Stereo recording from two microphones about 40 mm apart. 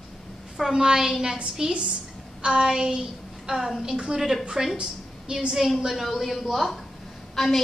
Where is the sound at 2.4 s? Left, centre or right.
Right.